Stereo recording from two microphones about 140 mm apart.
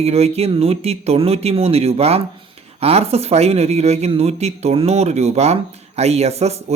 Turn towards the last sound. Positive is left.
turn(degrees=-50)  # may be behind; listen again after turning